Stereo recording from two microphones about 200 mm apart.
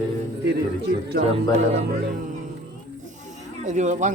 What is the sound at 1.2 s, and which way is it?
Speech, 45° right (ahead or behind).